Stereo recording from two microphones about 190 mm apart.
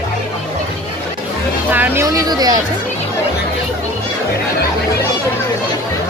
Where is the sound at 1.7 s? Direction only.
10° right (ahead or behind).